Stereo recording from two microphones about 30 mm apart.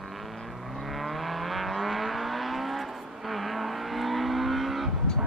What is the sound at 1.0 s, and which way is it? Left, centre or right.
Vehicle, centre.